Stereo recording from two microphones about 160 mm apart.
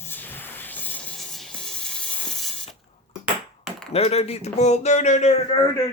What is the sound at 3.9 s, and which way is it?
Speech, 40° left (ahead or behind).